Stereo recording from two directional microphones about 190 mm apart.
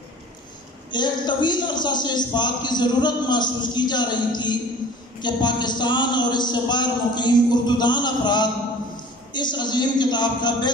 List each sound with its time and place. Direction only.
0.9 s a man's voice: 25° left (ahead or behind)